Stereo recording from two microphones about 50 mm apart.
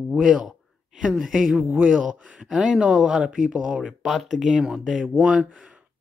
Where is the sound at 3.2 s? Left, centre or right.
Right.